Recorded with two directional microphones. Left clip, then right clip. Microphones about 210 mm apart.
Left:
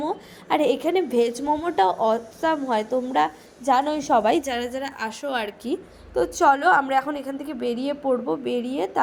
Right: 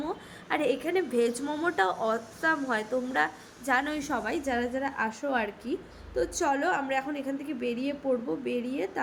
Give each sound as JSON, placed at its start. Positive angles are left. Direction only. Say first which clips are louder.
{"t": 0.4, "sound": "a woman's voice", "louder": "left 7 dB", "side_deg": 20}
{"t": 4.2, "sound": "a woman's voice", "louder": "left 8 dB", "side_deg": 40}
{"t": 6.1, "sound": "a woman's voice", "louder": "left 9 dB", "side_deg": 25}